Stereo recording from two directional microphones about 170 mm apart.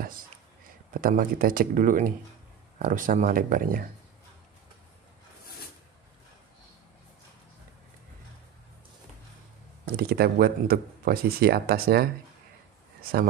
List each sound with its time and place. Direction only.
0.9 s speech: 55° right (ahead or behind)
9.9 s speech: 65° right (ahead or behind)